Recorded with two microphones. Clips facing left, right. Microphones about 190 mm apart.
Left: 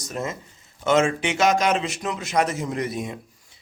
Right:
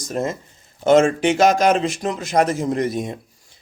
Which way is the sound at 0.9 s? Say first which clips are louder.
Right 6 dB; 50° right (ahead or behind).